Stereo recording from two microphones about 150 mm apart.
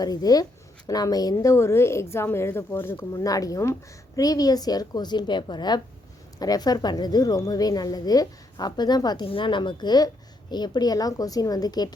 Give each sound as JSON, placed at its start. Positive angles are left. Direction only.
{"t": 0.0, "sound": "speech", "side_deg": 25}